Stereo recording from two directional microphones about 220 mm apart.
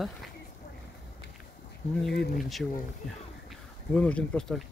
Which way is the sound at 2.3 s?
Centre (ahead or behind).